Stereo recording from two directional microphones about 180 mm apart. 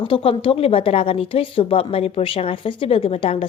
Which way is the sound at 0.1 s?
30° left (ahead or behind).